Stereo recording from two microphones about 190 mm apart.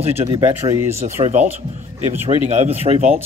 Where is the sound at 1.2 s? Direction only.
35° right (ahead or behind).